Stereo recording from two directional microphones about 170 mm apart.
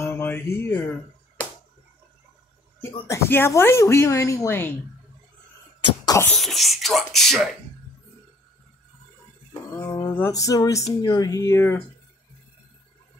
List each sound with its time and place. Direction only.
0.0 s music: 15° left (ahead or behind)
3.1 s speech: 15° left (ahead or behind)
6.0 s cough: 15° left (ahead or behind)
6.3 s speech: centre (ahead or behind)
9.5 s speech: 15° left (ahead or behind)